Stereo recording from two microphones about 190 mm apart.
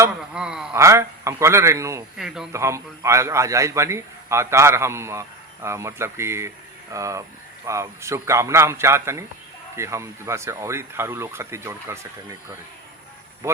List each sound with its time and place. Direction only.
0.3 s a man's voice: 5° right (ahead or behind)
0.7 s a man's voice: 15° right (ahead or behind)
2.1 s a man's voice: 5° right (ahead or behind)
2.5 s a man's voice: 15° right (ahead or behind)
13.4 s a man's voice: 15° right (ahead or behind)